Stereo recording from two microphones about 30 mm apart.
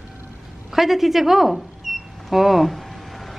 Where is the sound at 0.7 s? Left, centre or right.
Centre.